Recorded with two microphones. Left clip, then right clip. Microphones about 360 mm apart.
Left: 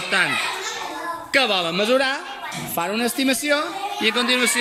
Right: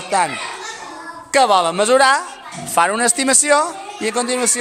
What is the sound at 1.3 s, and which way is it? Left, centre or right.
Speech, centre.